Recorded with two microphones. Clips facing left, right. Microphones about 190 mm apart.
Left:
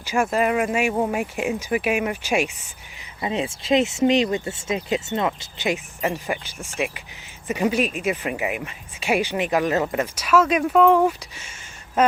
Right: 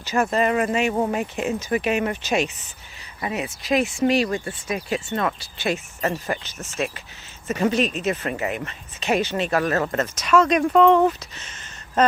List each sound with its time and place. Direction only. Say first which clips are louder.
0.0 s speech: even; 10° left (ahead or behind)
3.2 s speech: left 2 dB; 25° left (ahead or behind)